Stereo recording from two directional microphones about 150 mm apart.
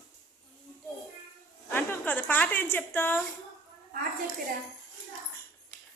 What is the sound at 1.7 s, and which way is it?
A woman's voice, 10° left (ahead or behind).